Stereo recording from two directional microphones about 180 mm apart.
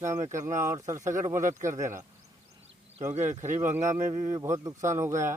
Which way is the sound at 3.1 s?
40° right (ahead or behind).